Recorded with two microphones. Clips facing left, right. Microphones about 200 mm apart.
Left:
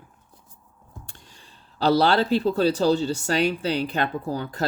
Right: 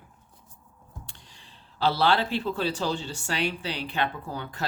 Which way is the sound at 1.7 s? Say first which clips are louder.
Left 5 dB; 40° left (ahead or behind).